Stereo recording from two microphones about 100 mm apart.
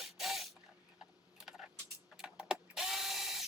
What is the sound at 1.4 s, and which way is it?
Typing, 5° right (ahead or behind).